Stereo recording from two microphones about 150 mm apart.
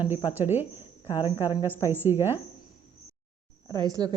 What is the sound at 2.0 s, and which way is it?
Speech, 15° right (ahead or behind).